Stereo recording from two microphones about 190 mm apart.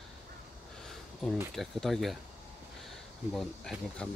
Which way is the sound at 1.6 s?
Centre (ahead or behind).